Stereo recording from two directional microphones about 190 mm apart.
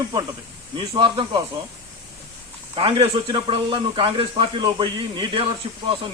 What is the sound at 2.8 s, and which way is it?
Speech, 30° right (ahead or behind).